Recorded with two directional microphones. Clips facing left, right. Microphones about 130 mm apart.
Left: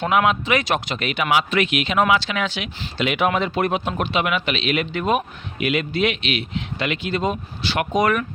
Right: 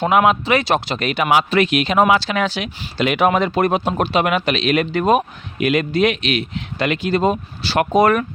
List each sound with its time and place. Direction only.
0.0 s speech: 45° right (ahead or behind)